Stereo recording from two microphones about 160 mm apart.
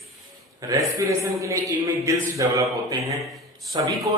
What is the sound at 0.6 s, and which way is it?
A man's voice, 20° right (ahead or behind).